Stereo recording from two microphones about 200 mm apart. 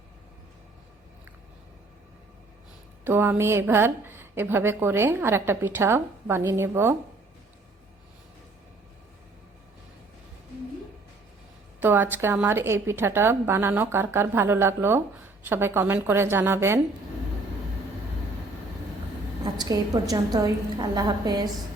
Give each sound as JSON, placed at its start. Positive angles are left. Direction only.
{"t": 3.0, "sound": "a woman's voice", "side_deg": -10}
{"t": 11.8, "sound": "a woman's voice", "side_deg": -10}
{"t": 19.5, "sound": "a woman's voice", "side_deg": -20}